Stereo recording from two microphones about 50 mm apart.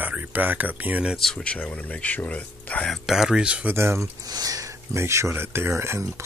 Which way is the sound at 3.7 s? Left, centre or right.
Right.